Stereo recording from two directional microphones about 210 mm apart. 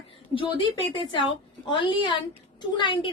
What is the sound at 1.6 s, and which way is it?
A woman's voice, 20° left (ahead or behind).